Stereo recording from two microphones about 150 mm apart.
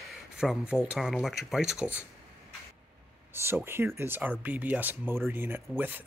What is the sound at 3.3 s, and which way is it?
Speech, 15° right (ahead or behind).